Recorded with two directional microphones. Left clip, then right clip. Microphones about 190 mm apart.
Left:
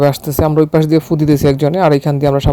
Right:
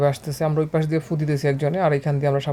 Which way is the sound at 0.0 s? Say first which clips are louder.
Left 9 dB; 40° left (ahead or behind).